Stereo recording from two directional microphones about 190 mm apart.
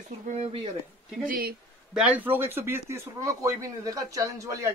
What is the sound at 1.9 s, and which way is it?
Speech, 5° right (ahead or behind).